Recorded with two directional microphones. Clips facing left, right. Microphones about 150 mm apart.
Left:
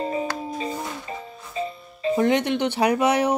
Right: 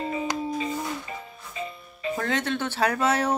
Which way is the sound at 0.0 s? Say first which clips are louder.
Left 2 dB; 35° left (ahead or behind).